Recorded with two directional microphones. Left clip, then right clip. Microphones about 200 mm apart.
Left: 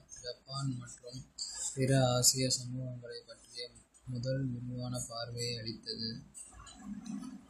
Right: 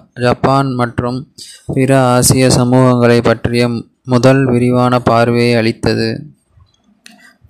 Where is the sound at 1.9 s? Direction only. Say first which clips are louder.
Right 19 dB; 55° right (ahead or behind).